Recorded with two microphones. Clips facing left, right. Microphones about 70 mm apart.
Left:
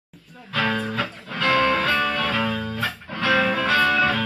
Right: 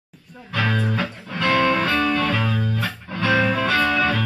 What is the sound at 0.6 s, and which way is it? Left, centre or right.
Music, centre.